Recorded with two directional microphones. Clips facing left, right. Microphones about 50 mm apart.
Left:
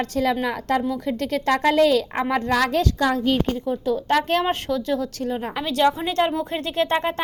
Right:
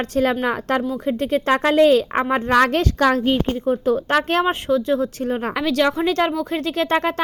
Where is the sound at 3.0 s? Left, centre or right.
Right.